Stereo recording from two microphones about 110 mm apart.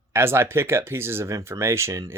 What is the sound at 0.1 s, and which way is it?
Speech, 20° right (ahead or behind).